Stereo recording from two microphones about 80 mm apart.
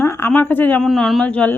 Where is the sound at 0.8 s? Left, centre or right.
Centre.